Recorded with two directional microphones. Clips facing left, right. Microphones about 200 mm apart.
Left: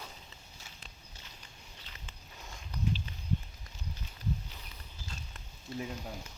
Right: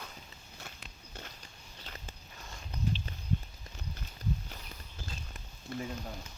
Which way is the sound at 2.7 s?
25° right (ahead or behind).